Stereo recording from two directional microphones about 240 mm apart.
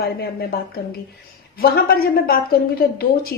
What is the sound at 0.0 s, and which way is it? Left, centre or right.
A woman's voice, left.